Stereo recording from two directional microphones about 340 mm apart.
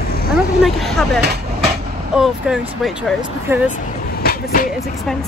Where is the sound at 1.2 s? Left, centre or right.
Right.